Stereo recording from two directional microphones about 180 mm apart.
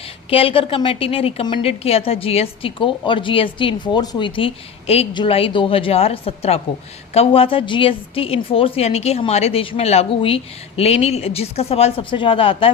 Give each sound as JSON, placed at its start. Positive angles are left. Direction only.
{"t": 0.3, "sound": "a woman's voice", "side_deg": 30}